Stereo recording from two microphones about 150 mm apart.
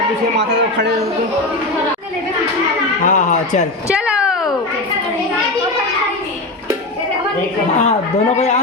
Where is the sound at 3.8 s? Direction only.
5° right (ahead or behind).